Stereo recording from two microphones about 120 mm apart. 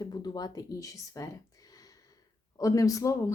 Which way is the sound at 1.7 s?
30° left (ahead or behind).